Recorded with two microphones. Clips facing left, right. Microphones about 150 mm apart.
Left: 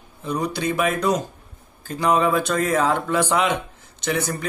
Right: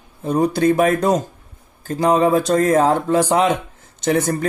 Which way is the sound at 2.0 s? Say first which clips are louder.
Right 4 dB; 35° right (ahead or behind).